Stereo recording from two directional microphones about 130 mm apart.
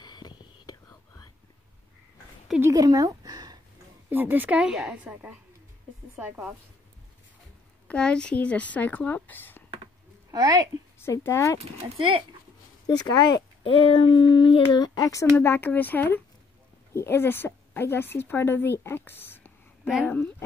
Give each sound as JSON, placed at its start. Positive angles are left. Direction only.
{"t": 0.0, "sound": "whispering", "side_deg": 35}
{"t": 2.6, "sound": "speech", "side_deg": -25}
{"t": 4.1, "sound": "a woman's voice", "side_deg": -15}
{"t": 7.9, "sound": "speech", "side_deg": 5}
{"t": 10.3, "sound": "a woman's voice", "side_deg": -30}
{"t": 11.0, "sound": "speech", "side_deg": 20}
{"t": 12.8, "sound": "a child's voice", "side_deg": 30}
{"t": 14.8, "sound": "a woman's voice", "side_deg": 25}